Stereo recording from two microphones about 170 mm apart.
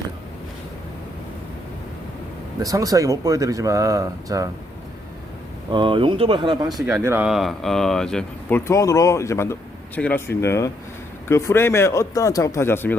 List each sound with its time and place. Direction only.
2.6 s speech: 20° right (ahead or behind)
5.7 s speech: 30° right (ahead or behind)
7.3 s speech: centre (ahead or behind)